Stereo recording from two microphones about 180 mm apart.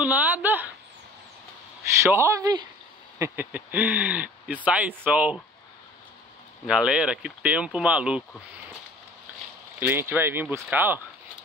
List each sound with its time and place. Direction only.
0.0 s a sound: 10° right (ahead or behind)
2.0 s speech: 15° right (ahead or behind)
6.7 s speech: 5° right (ahead or behind)
9.8 s speech: 10° right (ahead or behind)